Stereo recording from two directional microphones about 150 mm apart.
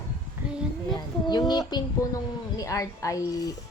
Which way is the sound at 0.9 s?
30° left (ahead or behind).